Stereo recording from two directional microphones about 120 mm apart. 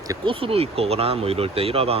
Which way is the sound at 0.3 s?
50° right (ahead or behind).